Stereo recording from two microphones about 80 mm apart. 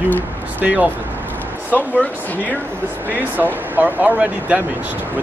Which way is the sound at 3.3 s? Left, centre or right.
Right.